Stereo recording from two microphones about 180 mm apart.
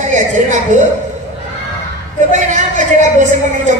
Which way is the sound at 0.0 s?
45° right (ahead or behind).